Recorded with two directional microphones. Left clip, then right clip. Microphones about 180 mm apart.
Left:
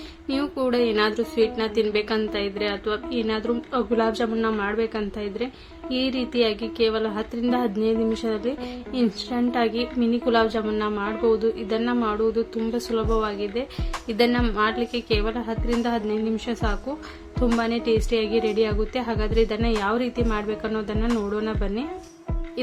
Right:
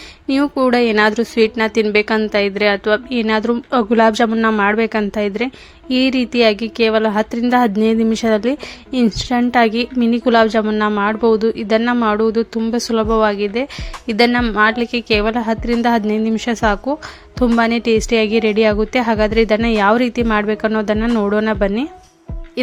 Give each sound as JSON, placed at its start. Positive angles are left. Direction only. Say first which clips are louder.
{"t": 0.3, "sound": "a woman's voice", "louder": "right 9 dB", "side_deg": -45}